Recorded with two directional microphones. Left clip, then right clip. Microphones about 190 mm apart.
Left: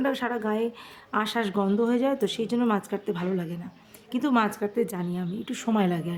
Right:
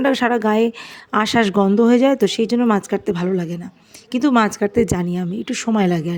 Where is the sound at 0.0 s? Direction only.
40° right (ahead or behind).